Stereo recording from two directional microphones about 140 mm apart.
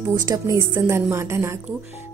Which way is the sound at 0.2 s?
25° right (ahead or behind).